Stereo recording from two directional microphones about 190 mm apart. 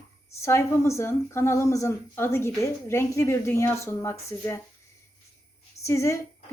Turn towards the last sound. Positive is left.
turn(degrees=15)  # may be behind; listen again after turning